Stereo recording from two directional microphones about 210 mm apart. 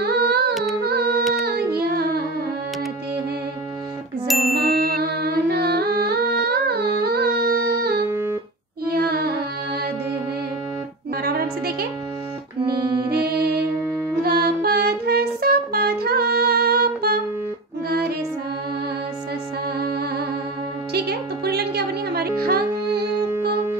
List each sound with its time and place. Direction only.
0.0 s humming: 50° right (ahead or behind)
0.8 s a sound: 50° right (ahead or behind)
1.4 s music: 50° right (ahead or behind)
4.3 s music: centre (ahead or behind)
4.6 s music: 45° right (ahead or behind)
8.1 s music: 10° right (ahead or behind)
8.8 s music: 45° right (ahead or behind)
11.2 s music: 45° right (ahead or behind)
12.6 s music: 20° right (ahead or behind)
13.1 s music: 45° right (ahead or behind)
19.8 s music: 45° right (ahead or behind)